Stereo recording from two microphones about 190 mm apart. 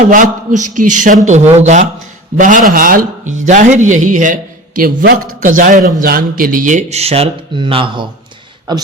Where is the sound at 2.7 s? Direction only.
45° right (ahead or behind).